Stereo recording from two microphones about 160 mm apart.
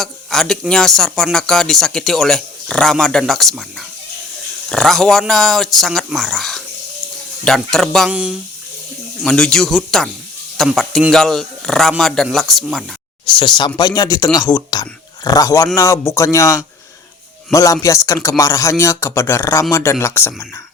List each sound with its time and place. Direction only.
0.0 s speech: centre (ahead or behind)
13.2 s speech: 30° left (ahead or behind); by 20.5 s 15° left (ahead or behind)